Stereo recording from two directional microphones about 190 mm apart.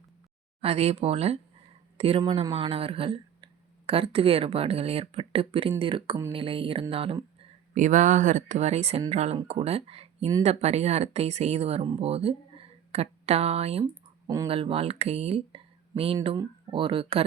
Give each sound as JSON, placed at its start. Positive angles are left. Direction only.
{"t": 0.6, "sound": "speech", "side_deg": -35}
{"t": 7.7, "sound": "speech", "side_deg": -40}